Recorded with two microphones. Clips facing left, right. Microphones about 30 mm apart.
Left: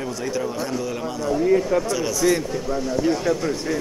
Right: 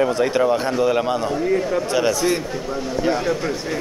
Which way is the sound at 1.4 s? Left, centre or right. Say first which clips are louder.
Left 1 dB; centre.